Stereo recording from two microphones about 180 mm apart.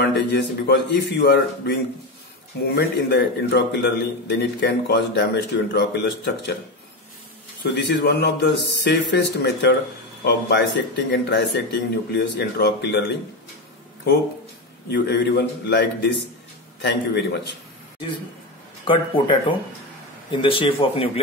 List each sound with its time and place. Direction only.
0.0 s a man's voice: 70° left (ahead or behind)
7.7 s a man's voice: 65° left (ahead or behind)
14.9 s a man's voice: 70° left (ahead or behind)
18.9 s speech: 25° left (ahead or behind)